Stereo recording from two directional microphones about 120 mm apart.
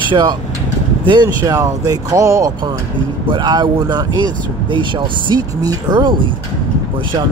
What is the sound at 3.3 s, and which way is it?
Speech, 40° right (ahead or behind).